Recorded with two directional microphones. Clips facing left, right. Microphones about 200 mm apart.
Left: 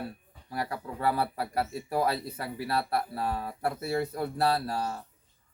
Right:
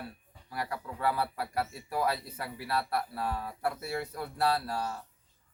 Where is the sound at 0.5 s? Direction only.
35° left (ahead or behind).